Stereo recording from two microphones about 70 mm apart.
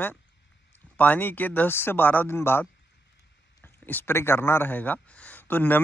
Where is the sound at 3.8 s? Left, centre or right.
Left.